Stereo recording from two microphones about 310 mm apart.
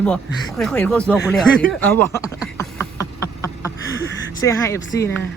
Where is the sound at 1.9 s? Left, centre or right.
Centre.